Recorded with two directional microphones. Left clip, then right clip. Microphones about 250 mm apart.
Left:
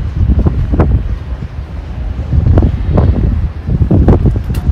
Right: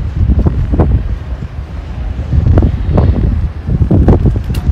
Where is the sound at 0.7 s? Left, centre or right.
Centre.